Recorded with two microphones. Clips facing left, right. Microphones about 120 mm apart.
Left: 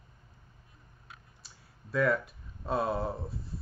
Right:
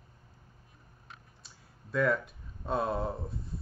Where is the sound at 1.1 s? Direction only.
Centre (ahead or behind).